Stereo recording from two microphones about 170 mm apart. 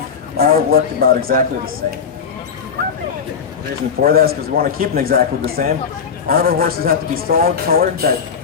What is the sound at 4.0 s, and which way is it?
Speech, 60° right (ahead or behind).